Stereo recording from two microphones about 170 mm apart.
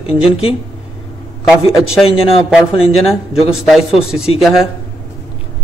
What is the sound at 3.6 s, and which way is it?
A man's voice, centre (ahead or behind).